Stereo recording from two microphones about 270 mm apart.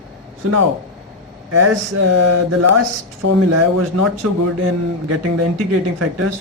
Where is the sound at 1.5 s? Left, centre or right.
Right.